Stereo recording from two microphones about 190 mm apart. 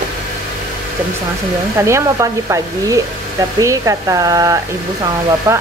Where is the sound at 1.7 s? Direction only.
15° right (ahead or behind).